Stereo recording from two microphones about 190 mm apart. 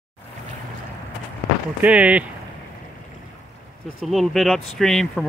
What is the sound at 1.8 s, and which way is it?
Speech, 5° right (ahead or behind).